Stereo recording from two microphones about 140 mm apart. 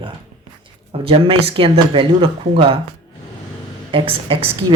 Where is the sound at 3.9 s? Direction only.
40° right (ahead or behind).